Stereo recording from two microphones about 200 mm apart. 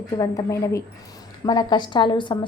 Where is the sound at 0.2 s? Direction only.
15° left (ahead or behind).